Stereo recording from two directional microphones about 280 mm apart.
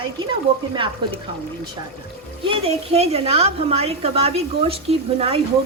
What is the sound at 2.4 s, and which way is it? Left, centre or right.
A woman's voice, centre.